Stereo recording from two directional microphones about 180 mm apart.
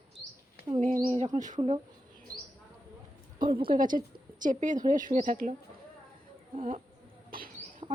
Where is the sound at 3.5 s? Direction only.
30° right (ahead or behind).